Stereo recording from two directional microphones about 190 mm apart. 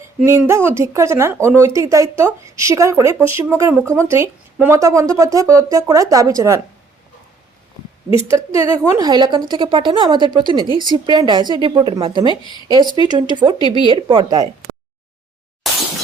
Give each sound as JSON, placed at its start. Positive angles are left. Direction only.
{"t": 0.2, "sound": "speech", "side_deg": -15}
{"t": 8.1, "sound": "a woman's voice", "side_deg": -15}
{"t": 15.6, "sound": "shatter", "side_deg": 0}